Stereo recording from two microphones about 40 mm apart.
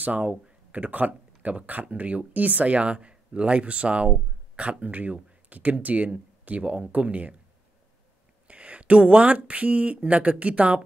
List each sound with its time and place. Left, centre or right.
0.0 s speech: right
8.5 s speech: right